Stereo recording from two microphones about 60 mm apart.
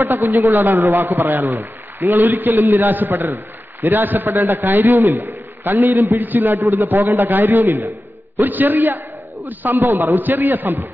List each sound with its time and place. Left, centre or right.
0.2 s a man's voice: right
0.9 s a man's voice: right
2.5 s a man's voice: right
2.8 s a man's voice: right
4.4 s a man's voice: right
8.4 s a man's voice: right
9.8 s a man's voice: right
10.1 s a man's voice: right